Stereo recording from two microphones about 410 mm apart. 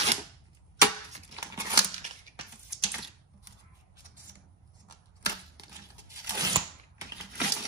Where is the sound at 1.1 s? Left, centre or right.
Centre.